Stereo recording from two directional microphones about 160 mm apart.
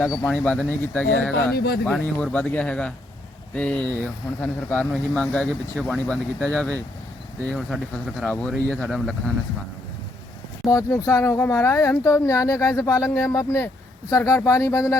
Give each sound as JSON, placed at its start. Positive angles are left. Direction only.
{"t": 0.1, "sound": "speech", "side_deg": 15}
{"t": 1.5, "sound": "speech", "side_deg": 90}
{"t": 1.8, "sound": "speech", "side_deg": 5}
{"t": 10.7, "sound": "speech", "side_deg": 20}